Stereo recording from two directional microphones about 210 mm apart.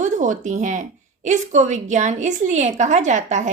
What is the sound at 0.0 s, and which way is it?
A woman's voice, 35° right (ahead or behind).